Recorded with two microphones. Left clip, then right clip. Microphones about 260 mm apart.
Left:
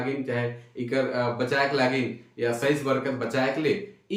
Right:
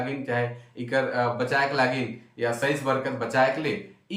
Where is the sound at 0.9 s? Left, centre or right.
Centre.